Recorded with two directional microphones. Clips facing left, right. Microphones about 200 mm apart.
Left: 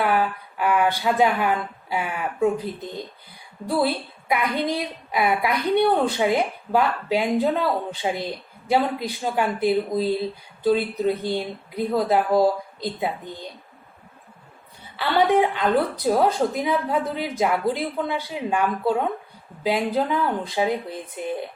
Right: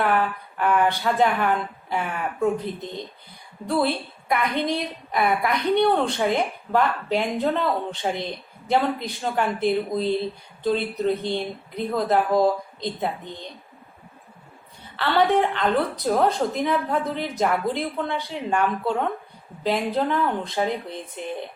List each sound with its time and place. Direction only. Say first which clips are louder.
0.0 s speech: left 1 dB; 5° left (ahead or behind)
3.7 s a woman's voice: even; 5° left (ahead or behind)
14.9 s a woman's voice: left 1 dB; 10° left (ahead or behind)